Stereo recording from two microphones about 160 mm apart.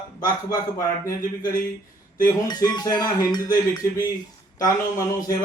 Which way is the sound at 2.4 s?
25° left (ahead or behind).